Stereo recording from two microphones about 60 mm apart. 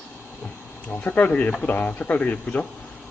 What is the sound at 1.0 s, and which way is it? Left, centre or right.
Speech, left.